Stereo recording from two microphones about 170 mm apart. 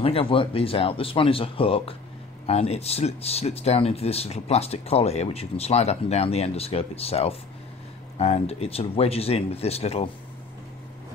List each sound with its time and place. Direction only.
0.0 s speech: 30° left (ahead or behind)